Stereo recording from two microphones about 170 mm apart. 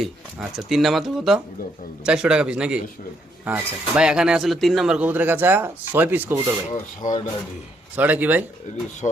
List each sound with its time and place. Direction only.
0.0 s speech: centre (ahead or behind)
6.7 s speech: 50° left (ahead or behind)
7.9 s speech: 10° right (ahead or behind)